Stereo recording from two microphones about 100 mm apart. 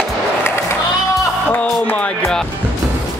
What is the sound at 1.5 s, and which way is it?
Music, 15° left (ahead or behind).